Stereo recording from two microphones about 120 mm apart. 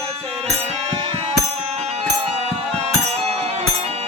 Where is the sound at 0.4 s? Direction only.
60° right (ahead or behind).